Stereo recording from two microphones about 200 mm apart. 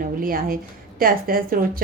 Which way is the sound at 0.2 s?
45° right (ahead or behind).